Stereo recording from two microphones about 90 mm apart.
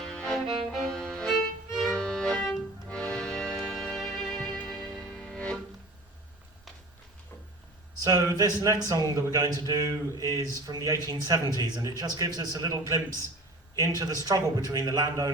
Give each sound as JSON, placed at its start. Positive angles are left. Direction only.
{"t": 0.0, "sound": "music", "side_deg": 10}
{"t": 8.0, "sound": "a man's voice", "side_deg": -45}